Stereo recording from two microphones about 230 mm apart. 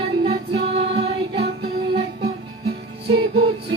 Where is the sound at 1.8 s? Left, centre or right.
Right.